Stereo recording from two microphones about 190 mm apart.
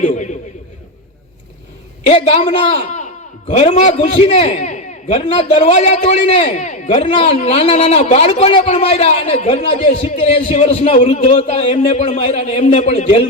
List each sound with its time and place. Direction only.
0.0 s a man's voice: 40° left (ahead or behind)
2.0 s a man's voice: 35° left (ahead or behind)